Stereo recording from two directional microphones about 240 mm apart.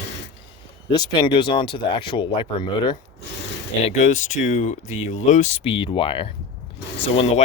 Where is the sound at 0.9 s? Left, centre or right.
Centre.